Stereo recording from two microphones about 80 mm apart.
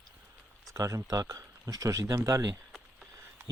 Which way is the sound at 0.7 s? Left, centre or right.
Right.